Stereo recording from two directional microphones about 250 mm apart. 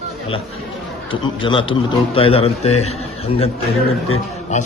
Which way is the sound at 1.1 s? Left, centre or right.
Centre.